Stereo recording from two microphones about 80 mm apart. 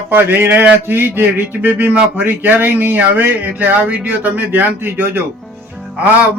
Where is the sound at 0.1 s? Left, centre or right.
Right.